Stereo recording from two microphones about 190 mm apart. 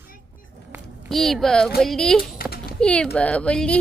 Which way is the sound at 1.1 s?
Centre (ahead or behind).